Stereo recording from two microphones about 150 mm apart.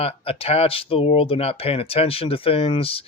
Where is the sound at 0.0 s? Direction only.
40° left (ahead or behind).